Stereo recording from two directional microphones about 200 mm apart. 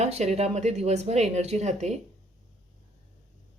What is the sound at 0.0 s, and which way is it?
A woman's voice, 35° right (ahead or behind).